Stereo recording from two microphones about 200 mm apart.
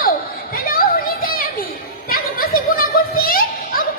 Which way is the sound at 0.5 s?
45° left (ahead or behind).